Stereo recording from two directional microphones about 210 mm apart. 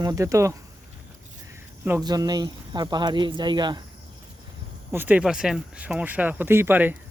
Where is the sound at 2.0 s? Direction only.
20° right (ahead or behind).